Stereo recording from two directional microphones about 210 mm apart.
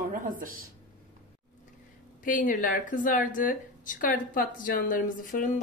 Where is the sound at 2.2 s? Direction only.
40° left (ahead or behind).